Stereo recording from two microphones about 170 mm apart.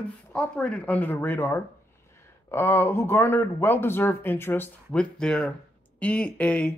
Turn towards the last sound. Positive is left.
turn(degrees=5)  # may be behind; listen again after turning